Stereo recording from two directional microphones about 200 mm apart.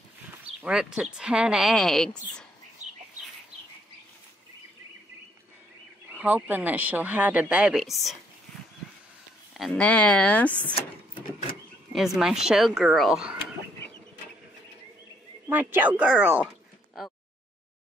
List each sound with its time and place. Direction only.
0.6 s a woman's voice: 5° right (ahead or behind)
6.0 s speech: 10° right (ahead or behind)
9.5 s speech: centre (ahead or behind)
10.7 s printer: 25° left (ahead or behind)
11.9 s a woman's voice: centre (ahead or behind)
15.4 s speech: 10° right (ahead or behind)